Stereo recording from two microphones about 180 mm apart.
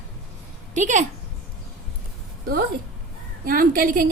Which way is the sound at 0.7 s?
40° right (ahead or behind).